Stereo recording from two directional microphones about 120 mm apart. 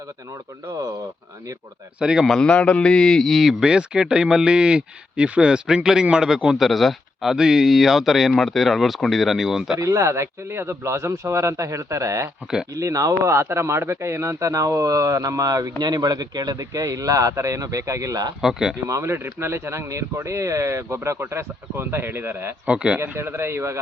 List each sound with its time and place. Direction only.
2.0 s a man's voice: 5° right (ahead or behind)
9.8 s speech: 25° right (ahead or behind)
18.4 s a man's voice: 5° right (ahead or behind)
18.9 s speech: 25° right (ahead or behind)